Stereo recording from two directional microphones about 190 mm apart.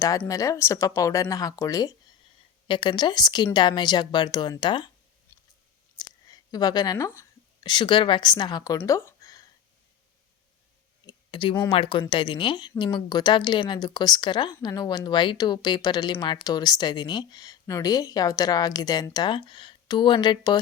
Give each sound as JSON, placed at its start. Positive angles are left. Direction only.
{"t": 0.3, "sound": "speech", "side_deg": 15}
{"t": 5.3, "sound": "chewing", "side_deg": 10}
{"t": 6.2, "sound": "a woman's voice", "side_deg": 20}
{"t": 11.0, "sound": "a sound", "side_deg": 25}
{"t": 11.7, "sound": "speech", "side_deg": 25}